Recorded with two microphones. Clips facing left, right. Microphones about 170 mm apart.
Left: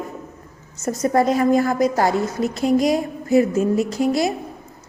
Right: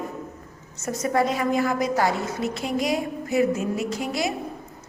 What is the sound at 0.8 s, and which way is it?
A woman's voice, 40° left (ahead or behind).